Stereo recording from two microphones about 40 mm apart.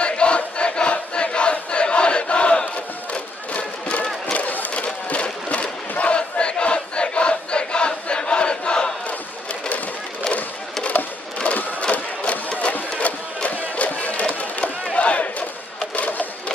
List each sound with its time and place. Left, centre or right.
0.0 s crowd: left
3.5 s a sound: left
10.3 s a sound: left
12.5 s sewing machine: left
13.0 s music: left
15.0 s battle cry: left
16.0 s sewing machine: left